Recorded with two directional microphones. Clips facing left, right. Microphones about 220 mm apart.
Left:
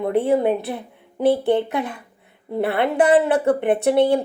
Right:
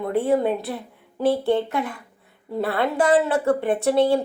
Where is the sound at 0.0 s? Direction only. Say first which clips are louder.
Left 2 dB; 20° left (ahead or behind).